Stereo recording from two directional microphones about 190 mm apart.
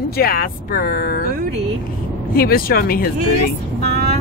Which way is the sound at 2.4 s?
50° left (ahead or behind).